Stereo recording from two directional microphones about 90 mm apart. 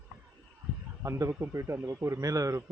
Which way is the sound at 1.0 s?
35° right (ahead or behind).